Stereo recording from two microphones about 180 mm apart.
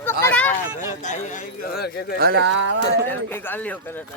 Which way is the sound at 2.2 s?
75° right (ahead or behind).